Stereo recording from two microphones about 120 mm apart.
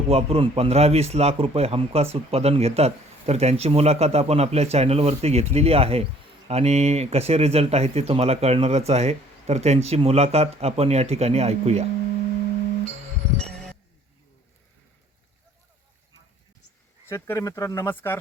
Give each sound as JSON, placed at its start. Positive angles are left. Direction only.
{"t": 0.1, "sound": "a man's voice", "side_deg": -55}
{"t": 17.1, "sound": "speech", "side_deg": 25}
{"t": 17.8, "sound": "speech", "side_deg": 15}